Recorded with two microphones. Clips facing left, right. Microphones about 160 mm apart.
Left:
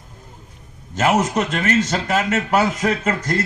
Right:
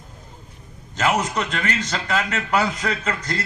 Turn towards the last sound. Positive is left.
turn(degrees=50)  # may be behind; listen again after turning